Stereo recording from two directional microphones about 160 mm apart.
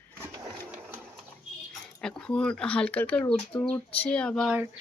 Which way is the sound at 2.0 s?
5° left (ahead or behind).